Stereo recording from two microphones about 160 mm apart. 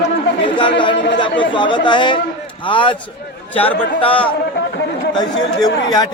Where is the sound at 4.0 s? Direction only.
35° left (ahead or behind).